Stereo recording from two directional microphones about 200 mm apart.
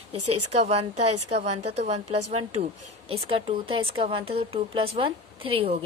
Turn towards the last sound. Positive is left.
turn(degrees=-30)  # may be behind; listen again after turning